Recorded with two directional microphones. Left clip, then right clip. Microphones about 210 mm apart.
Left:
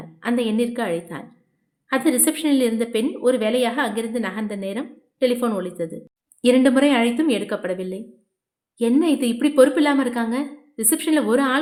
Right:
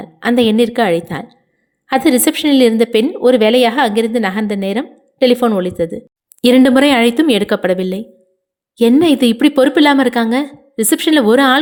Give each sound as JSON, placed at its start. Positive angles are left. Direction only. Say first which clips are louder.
{"t": 0.0, "sound": "a woman's voice", "louder": "right 10 dB", "side_deg": -35}